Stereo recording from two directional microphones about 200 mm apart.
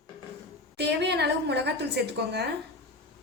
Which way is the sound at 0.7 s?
55° right (ahead or behind).